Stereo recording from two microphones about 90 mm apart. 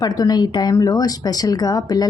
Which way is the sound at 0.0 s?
45° left (ahead or behind).